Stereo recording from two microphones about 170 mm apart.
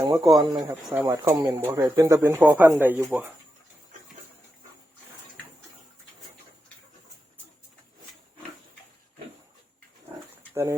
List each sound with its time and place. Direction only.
0.2 s speech: centre (ahead or behind)
0.4 s speech: 20° right (ahead or behind)
0.7 s speech: 10° right (ahead or behind)
10.5 s speech: 15° right (ahead or behind)